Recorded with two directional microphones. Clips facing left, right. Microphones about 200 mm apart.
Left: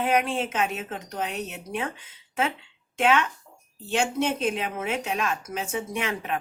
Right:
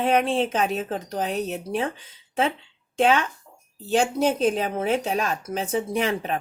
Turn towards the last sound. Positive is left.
turn(degrees=-35)  # may be behind; listen again after turning